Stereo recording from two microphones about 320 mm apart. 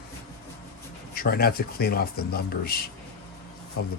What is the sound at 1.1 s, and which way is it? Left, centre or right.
Speech, left.